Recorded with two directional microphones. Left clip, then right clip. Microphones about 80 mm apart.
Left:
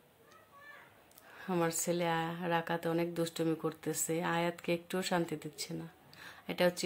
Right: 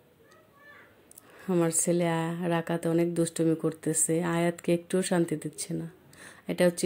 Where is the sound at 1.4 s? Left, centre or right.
Centre.